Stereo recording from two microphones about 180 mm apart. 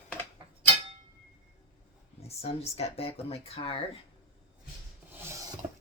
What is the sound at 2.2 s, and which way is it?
Speech, 35° left (ahead or behind).